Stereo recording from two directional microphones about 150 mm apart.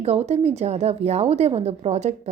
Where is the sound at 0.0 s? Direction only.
45° right (ahead or behind).